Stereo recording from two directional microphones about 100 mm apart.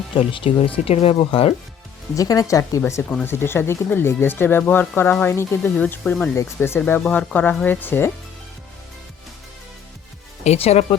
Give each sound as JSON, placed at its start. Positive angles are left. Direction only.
{"t": 0.2, "sound": "speech", "side_deg": 60}
{"t": 0.9, "sound": "speech", "side_deg": 70}
{"t": 2.1, "sound": "speech", "side_deg": 35}
{"t": 6.3, "sound": "speech", "side_deg": 25}
{"t": 10.4, "sound": "speech", "side_deg": 90}